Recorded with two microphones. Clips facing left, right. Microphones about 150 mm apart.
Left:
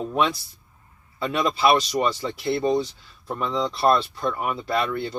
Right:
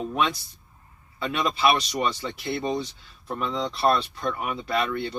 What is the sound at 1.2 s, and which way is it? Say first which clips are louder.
Speech: left 2 dB; 35° left (ahead or behind).